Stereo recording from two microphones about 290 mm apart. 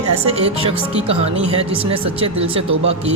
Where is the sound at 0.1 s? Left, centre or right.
Right.